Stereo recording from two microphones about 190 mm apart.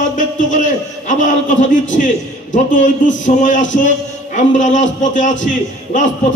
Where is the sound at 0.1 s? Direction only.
40° left (ahead or behind).